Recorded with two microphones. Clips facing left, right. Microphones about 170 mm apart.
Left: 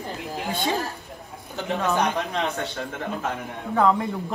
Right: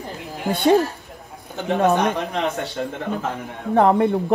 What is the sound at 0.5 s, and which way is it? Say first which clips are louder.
Speech: right 10 dB; 65° right (ahead or behind).